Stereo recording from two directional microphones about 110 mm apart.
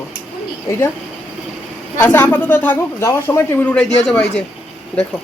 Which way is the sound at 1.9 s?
15° left (ahead or behind).